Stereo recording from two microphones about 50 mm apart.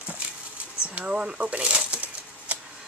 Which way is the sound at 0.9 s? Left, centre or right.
Right.